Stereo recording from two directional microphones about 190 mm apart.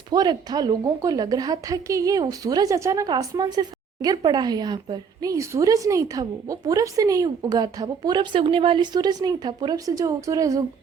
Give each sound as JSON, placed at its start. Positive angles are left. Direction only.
{"t": 0.1, "sound": "a woman's voice", "side_deg": -20}